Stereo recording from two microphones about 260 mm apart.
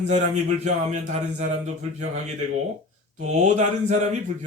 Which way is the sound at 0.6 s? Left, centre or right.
Right.